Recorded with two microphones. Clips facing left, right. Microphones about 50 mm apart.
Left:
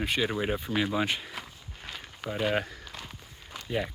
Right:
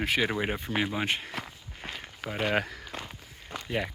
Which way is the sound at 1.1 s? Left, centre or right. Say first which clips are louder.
Right 2 dB; right.